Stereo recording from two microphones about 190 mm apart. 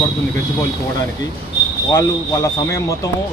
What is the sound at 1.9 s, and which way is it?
Speech, 15° left (ahead or behind).